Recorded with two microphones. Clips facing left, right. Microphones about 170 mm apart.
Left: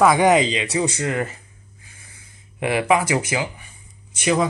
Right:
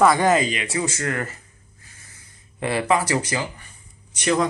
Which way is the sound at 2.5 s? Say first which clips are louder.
Left 2 dB; 15° left (ahead or behind).